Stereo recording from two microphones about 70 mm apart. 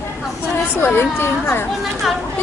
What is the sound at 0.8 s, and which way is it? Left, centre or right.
Speech, left.